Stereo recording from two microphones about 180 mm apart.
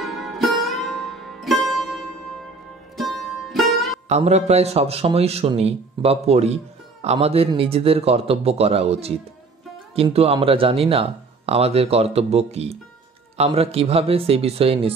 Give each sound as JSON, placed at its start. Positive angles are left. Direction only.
{"t": 0.0, "sound": "music", "side_deg": 0}
{"t": 4.1, "sound": "a man's voice", "side_deg": -35}
{"t": 10.1, "sound": "a man's voice", "side_deg": -30}